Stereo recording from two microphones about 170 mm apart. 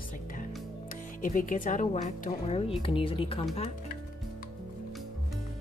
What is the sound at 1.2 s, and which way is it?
Speech, 50° left (ahead or behind).